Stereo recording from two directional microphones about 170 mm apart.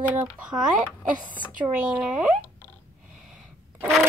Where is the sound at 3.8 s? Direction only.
Centre (ahead or behind).